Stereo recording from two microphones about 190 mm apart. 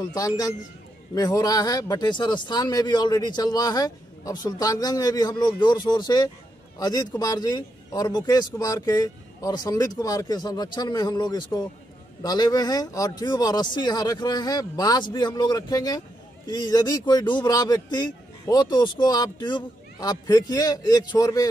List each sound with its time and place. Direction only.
0.0 s speech: 20° left (ahead or behind)